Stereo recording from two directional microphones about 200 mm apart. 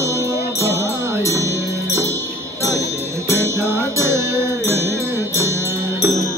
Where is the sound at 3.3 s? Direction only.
15° right (ahead or behind).